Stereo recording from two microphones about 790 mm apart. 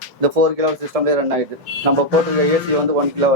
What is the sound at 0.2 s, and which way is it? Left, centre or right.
A man's voice, right.